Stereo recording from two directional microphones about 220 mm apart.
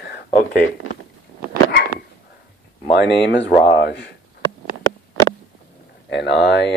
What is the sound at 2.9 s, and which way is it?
Speech, 50° left (ahead or behind).